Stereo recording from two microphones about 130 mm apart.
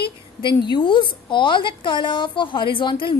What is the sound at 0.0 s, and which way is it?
A woman's voice, 40° left (ahead or behind).